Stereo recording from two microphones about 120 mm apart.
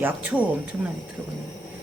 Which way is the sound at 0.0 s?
15° right (ahead or behind).